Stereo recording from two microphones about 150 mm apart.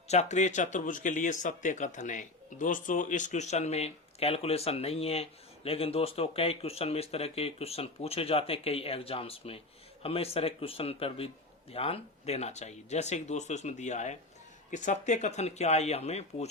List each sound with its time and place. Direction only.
0.1 s a man's voice: 50° left (ahead or behind)